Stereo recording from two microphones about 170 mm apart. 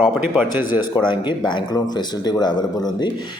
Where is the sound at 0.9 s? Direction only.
25° left (ahead or behind).